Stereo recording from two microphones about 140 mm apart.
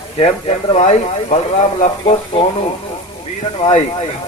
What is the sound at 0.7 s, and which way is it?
Speech, 55° left (ahead or behind).